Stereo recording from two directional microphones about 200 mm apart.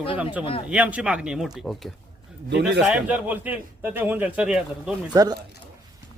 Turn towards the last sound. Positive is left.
turn(degrees=-15)  # may be behind; listen again after turning